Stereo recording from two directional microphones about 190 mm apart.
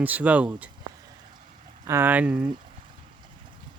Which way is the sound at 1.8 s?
15° right (ahead or behind).